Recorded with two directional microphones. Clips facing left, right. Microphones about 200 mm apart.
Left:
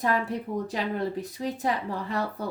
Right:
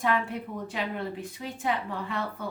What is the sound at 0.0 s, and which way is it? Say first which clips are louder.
Speech: left 1 dB; 40° left (ahead or behind).